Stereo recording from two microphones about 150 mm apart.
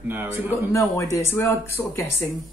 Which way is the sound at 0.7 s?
20° left (ahead or behind).